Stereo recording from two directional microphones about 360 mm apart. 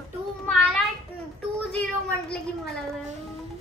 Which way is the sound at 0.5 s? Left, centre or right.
Centre.